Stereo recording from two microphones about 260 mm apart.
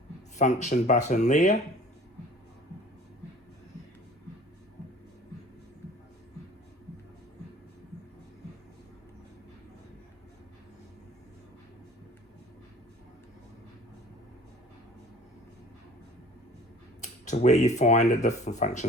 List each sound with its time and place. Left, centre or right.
0.3 s speech: left
17.0 s speech: left